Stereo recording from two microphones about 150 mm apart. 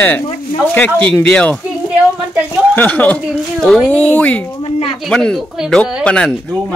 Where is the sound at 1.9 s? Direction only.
10° right (ahead or behind).